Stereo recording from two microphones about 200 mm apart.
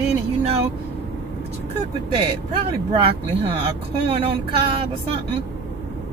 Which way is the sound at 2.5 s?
30° right (ahead or behind).